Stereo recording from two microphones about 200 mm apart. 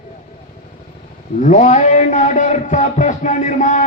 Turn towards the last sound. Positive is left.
turn(degrees=40)  # may be behind; listen again after turning